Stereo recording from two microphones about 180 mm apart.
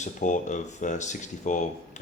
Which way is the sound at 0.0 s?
45° left (ahead or behind).